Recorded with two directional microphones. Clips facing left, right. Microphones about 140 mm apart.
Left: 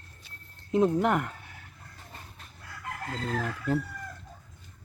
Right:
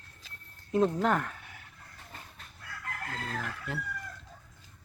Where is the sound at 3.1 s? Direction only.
20° left (ahead or behind).